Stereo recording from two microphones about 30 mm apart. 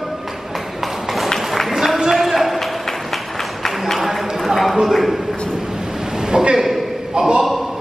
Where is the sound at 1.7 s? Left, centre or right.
Centre.